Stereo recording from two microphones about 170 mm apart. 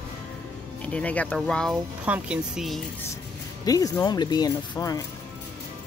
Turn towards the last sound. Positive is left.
turn(degrees=20)  # may be behind; listen again after turning